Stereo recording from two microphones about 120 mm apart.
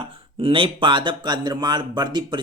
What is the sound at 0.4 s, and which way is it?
Speech, 45° right (ahead or behind).